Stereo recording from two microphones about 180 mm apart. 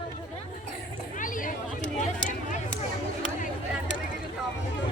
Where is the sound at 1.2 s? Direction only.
50° left (ahead or behind).